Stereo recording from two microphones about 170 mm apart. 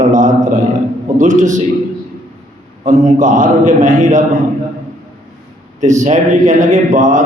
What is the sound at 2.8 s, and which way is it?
A man's voice, 50° right (ahead or behind).